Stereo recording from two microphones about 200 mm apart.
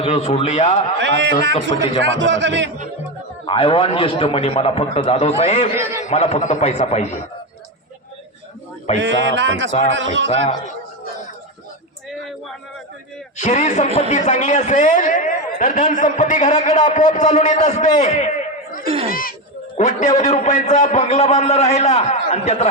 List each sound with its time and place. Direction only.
0.0 s a man's voice: 30° left (ahead or behind)
0.9 s a sound: 60° right (ahead or behind)
3.4 s a man's voice: 30° left (ahead or behind)
5.7 s a man's voice: 10° right (ahead or behind)
6.1 s a man's voice: 35° left (ahead or behind)
9.0 s a sound: 65° right (ahead or behind)
9.9 s speech: 65° right (ahead or behind)
13.3 s a man's voice: 35° left (ahead or behind)
19.7 s a man's voice: 35° left (ahead or behind)